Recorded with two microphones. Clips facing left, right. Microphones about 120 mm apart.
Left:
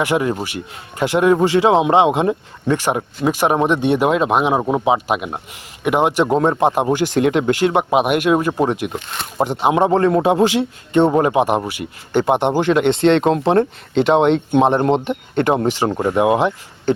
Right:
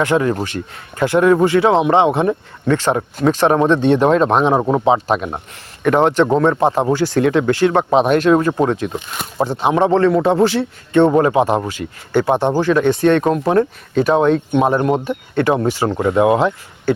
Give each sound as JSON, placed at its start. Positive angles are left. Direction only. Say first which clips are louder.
{"t": 0.0, "sound": "speech", "louder": "right 2 dB", "side_deg": 15}